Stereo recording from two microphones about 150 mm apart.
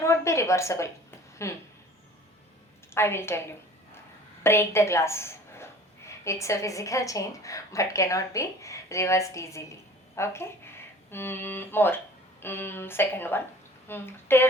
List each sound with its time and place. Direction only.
0.0 s a woman's voice: 20° left (ahead or behind)
2.9 s speech: 15° left (ahead or behind)
4.4 s a woman's voice: 15° left (ahead or behind)